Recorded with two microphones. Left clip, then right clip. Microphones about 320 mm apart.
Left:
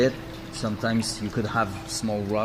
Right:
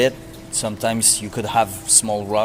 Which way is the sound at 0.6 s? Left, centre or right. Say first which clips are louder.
Right 6 dB; right.